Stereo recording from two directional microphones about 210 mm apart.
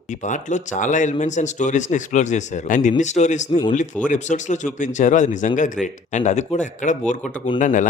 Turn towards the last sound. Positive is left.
turn(degrees=40)  # may be behind; listen again after turning